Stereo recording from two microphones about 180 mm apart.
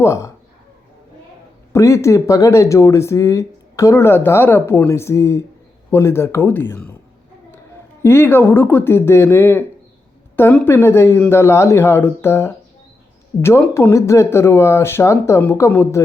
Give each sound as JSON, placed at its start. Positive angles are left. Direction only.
{"t": 0.0, "sound": "speech", "side_deg": 15}
{"t": 1.7, "sound": "speech", "side_deg": 15}
{"t": 8.0, "sound": "speech", "side_deg": 10}